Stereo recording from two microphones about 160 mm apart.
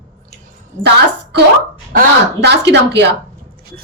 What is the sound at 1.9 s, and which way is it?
Speech, 90° right.